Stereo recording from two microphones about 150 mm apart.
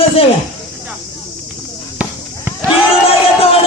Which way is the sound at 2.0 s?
10° right (ahead or behind).